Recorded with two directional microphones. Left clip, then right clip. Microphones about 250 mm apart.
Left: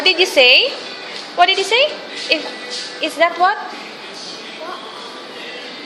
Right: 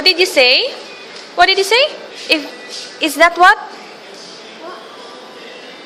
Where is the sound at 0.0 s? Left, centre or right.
Right.